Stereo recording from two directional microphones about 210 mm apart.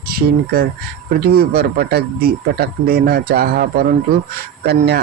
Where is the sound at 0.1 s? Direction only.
45° right (ahead or behind).